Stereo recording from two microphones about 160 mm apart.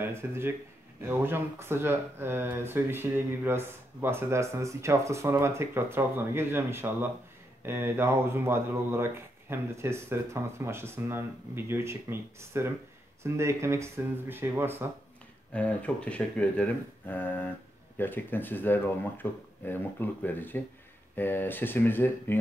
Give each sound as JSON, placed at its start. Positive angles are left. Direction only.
{"t": 0.0, "sound": "speech", "side_deg": -15}
{"t": 15.5, "sound": "speech", "side_deg": 10}